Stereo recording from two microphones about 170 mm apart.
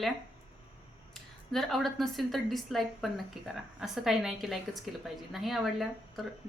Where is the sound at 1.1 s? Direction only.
Centre (ahead or behind).